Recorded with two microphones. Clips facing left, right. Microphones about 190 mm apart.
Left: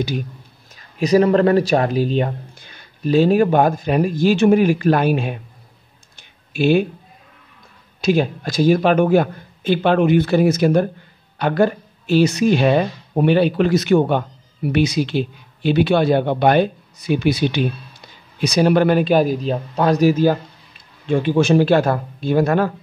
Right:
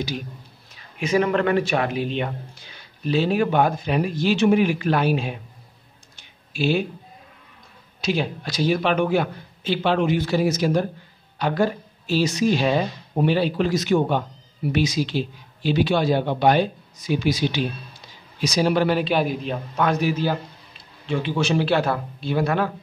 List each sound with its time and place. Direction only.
0.9 s speech: 35° left (ahead or behind)
2.6 s speech: 50° left (ahead or behind)
6.5 s speech: 55° left (ahead or behind)
8.0 s speech: 50° left (ahead or behind)